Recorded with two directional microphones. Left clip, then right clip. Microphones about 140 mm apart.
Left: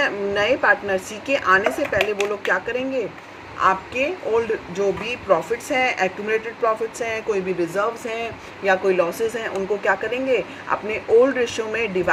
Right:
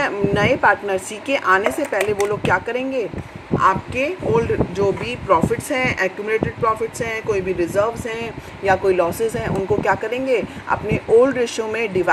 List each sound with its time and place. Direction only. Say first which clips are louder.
0.0 s a woman's voice: right 2 dB; 30° right (ahead or behind)
3.6 s speech: right 1 dB; 20° right (ahead or behind)
8.6 s speech: right 2 dB; 25° right (ahead or behind)